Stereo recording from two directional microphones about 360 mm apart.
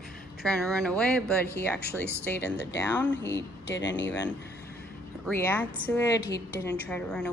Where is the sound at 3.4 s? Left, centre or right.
Left.